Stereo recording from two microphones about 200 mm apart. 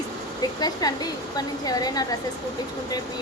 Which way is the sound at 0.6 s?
20° left (ahead or behind).